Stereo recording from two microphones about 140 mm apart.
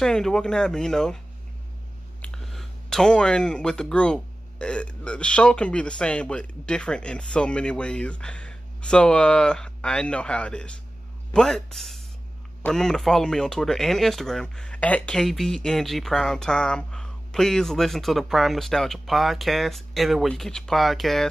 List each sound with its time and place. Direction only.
0.0 s speech: 5° left (ahead or behind)
2.2 s speech: 5° left (ahead or behind)